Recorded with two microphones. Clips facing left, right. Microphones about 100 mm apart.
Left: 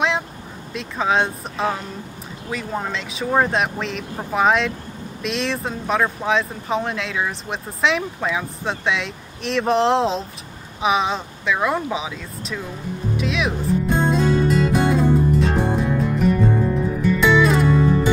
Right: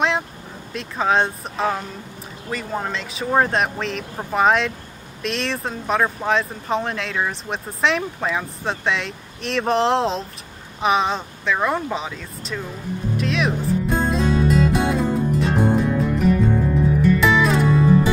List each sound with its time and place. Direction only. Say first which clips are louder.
0.7 s speech: right 1 dB; centre (ahead or behind)
13.1 s music: right 1 dB; centre (ahead or behind)